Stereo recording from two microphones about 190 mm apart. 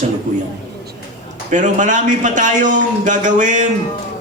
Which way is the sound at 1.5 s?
40° right (ahead or behind).